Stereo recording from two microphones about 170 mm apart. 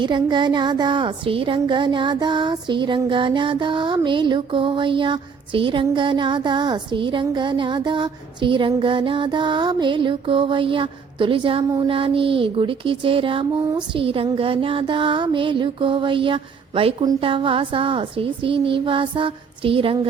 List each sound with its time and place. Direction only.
0.0 s a woman's voice: 25° right (ahead or behind)